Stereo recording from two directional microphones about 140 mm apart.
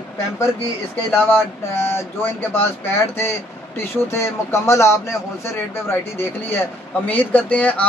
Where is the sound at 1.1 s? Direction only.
15° left (ahead or behind).